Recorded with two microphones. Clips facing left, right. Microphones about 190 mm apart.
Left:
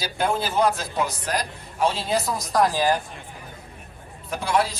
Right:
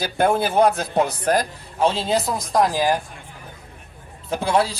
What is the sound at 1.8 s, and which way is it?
A man's voice, 25° right (ahead or behind).